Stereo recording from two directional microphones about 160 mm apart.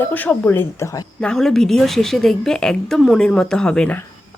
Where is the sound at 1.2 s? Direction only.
5° left (ahead or behind).